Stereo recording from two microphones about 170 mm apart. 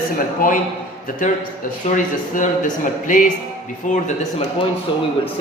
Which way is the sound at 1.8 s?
50° left (ahead or behind).